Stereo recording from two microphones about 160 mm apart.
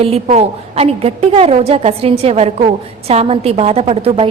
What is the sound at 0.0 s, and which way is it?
A woman's voice, 40° right (ahead or behind).